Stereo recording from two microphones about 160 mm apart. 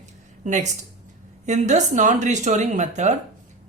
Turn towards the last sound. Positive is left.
turn(degrees=-45)  # may be behind; listen again after turning